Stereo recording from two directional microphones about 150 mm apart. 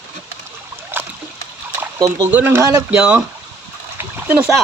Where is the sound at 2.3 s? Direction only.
15° right (ahead or behind).